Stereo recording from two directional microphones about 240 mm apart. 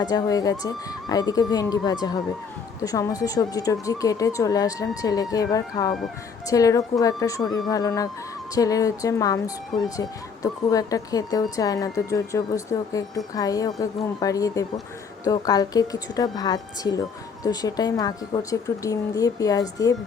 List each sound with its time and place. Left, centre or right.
0.0 s a woman's voice: centre